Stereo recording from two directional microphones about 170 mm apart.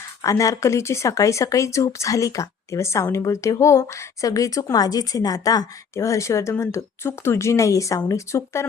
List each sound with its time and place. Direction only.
0.2 s speech: 20° left (ahead or behind)